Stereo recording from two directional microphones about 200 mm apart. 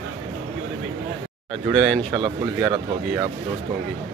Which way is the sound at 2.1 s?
25° right (ahead or behind).